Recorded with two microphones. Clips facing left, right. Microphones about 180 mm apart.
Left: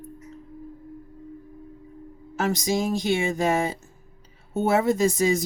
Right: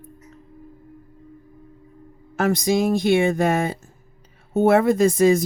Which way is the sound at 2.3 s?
55° right (ahead or behind).